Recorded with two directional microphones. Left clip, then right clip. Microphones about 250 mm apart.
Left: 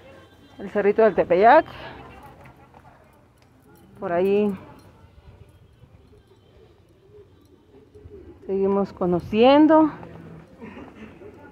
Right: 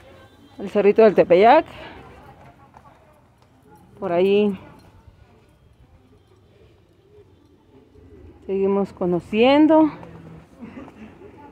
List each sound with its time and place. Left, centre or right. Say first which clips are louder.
0.6 s speech: right 4 dB; right
1.5 s speech: even; centre
4.0 s speech: right 3 dB; centre
8.5 s speech: right 1 dB; centre